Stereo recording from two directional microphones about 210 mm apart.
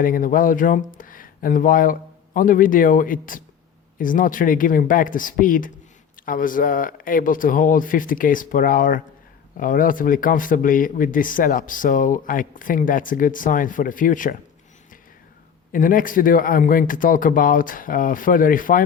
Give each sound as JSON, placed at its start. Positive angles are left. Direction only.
{"t": 0.0, "sound": "speech", "side_deg": 40}
{"t": 15.7, "sound": "speech", "side_deg": 40}